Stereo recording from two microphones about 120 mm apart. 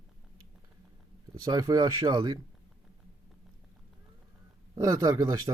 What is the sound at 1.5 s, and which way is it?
Speech, 35° right (ahead or behind).